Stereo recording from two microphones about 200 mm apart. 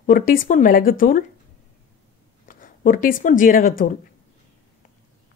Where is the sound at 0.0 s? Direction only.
45° left (ahead or behind).